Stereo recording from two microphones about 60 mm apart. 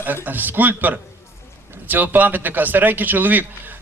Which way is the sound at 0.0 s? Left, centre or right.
Right.